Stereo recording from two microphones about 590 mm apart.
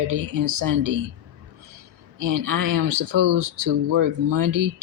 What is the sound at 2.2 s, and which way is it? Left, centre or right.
Speech, right.